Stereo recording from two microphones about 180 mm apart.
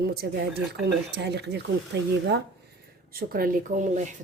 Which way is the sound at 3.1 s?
55° right (ahead or behind).